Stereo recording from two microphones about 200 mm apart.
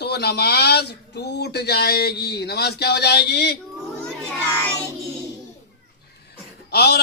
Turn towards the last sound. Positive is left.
turn(degrees=55)  # may be behind; listen again after turning